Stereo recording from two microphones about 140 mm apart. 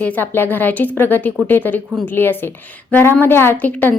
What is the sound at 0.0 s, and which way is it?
A woman's voice, 10° left (ahead or behind).